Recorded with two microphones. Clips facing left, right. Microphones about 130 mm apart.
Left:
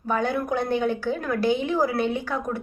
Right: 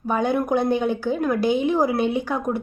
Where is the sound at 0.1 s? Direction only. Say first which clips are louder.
Right 4 dB; 15° right (ahead or behind).